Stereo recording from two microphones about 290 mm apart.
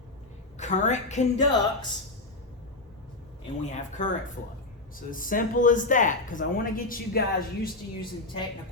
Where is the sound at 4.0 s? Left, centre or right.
Left.